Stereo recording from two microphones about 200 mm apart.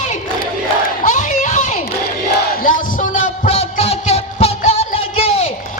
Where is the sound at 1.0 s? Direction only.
40° left (ahead or behind).